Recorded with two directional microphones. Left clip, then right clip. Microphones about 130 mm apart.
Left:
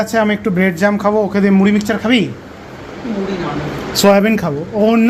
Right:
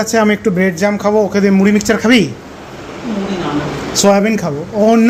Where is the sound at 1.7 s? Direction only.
35° right (ahead or behind).